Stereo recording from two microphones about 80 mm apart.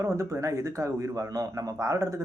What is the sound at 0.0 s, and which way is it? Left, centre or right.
A man's voice, right.